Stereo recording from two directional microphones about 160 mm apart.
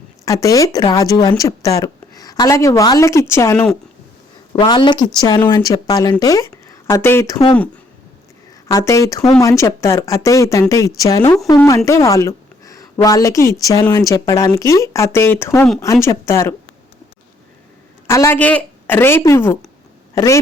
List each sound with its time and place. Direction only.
0.4 s speech: 20° left (ahead or behind)
4.6 s a woman's voice: 30° left (ahead or behind)
8.6 s a woman's voice: 20° left (ahead or behind)
18.1 s a woman's voice: 15° left (ahead or behind)